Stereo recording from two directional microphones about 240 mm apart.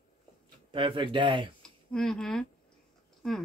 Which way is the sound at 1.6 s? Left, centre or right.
Centre.